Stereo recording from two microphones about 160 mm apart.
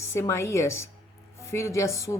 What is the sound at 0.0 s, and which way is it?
A woman's voice, 15° left (ahead or behind).